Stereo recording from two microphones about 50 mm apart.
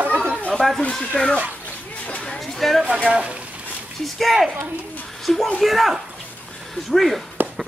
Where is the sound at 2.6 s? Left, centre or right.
Centre.